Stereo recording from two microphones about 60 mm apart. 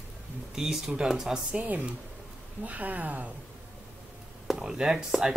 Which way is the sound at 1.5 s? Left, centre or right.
Right.